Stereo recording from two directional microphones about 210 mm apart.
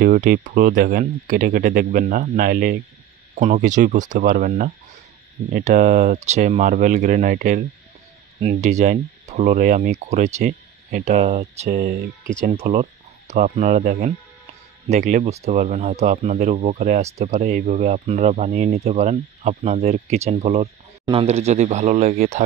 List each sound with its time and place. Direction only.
0.0 s speech: 40° right (ahead or behind)